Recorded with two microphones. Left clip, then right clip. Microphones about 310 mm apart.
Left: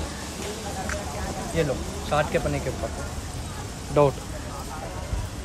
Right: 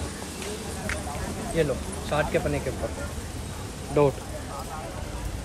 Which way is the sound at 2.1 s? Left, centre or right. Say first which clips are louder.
Left 1 dB; centre.